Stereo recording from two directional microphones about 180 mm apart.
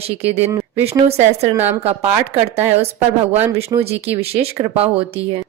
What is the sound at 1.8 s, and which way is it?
Speech, 35° right (ahead or behind).